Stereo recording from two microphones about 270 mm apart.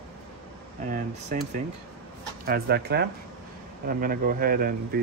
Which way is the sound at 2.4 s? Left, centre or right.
Right.